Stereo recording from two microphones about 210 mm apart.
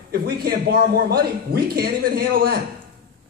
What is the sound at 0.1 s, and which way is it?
A man's voice, 45° right (ahead or behind).